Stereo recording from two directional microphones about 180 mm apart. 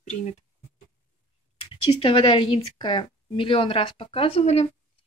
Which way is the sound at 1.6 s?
30° left (ahead or behind).